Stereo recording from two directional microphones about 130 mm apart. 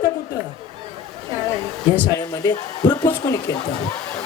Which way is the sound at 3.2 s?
30° left (ahead or behind).